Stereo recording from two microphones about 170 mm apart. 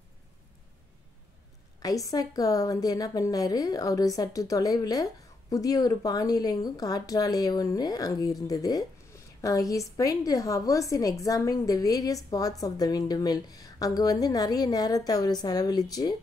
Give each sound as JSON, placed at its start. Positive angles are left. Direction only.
{"t": 2.0, "sound": "a woman's voice", "side_deg": 20}